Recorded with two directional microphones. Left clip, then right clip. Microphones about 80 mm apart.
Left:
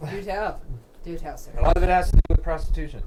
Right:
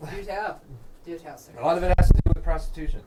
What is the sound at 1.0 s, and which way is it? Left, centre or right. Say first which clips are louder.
Speech: left 2 dB; left.